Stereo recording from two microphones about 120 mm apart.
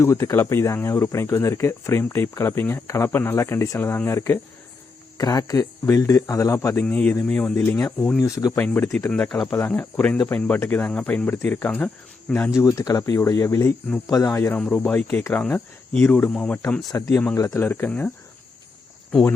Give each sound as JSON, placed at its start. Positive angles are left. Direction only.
{"t": 0.0, "sound": "speech", "side_deg": 25}
{"t": 5.1, "sound": "speech", "side_deg": 35}
{"t": 6.8, "sound": "speech", "side_deg": 15}
{"t": 8.2, "sound": "speech", "side_deg": 30}
{"t": 8.5, "sound": "speech", "side_deg": 15}
{"t": 12.5, "sound": "speech", "side_deg": 30}
{"t": 16.9, "sound": "speech", "side_deg": 20}